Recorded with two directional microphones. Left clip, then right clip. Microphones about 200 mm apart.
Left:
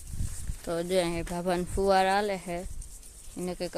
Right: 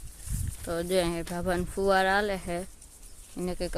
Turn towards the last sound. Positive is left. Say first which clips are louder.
# right 1 dB
turn(degrees=0)  # may be behind; listen again after turning